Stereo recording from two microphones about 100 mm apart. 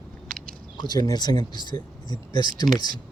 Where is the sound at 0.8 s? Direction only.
40° left (ahead or behind).